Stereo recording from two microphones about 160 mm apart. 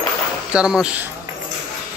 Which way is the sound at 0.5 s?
5° right (ahead or behind).